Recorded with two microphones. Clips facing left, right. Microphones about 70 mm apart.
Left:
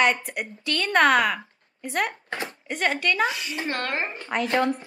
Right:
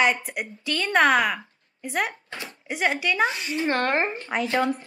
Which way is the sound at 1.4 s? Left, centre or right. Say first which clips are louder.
Left 1 dB; centre.